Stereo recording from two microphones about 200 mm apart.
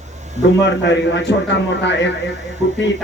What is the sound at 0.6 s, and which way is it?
A man's voice, 65° left (ahead or behind).